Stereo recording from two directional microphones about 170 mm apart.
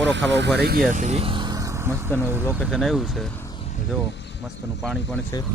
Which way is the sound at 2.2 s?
15° right (ahead or behind).